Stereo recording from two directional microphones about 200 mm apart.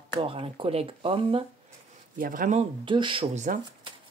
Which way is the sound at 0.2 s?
25° right (ahead or behind).